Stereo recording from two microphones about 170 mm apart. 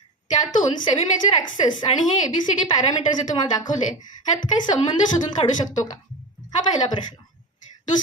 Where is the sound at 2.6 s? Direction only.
25° left (ahead or behind).